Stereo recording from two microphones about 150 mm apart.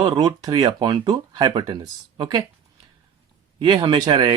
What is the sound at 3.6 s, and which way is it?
Speech, 30° right (ahead or behind).